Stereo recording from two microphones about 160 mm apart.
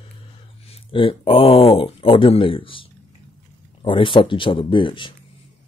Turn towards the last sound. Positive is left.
turn(degrees=30)  # may be behind; listen again after turning